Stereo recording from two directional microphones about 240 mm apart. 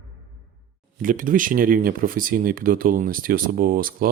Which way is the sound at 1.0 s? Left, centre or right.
Right.